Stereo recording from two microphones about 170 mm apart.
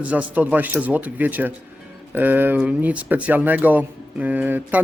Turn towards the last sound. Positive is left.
turn(degrees=-10)  # may be behind; listen again after turning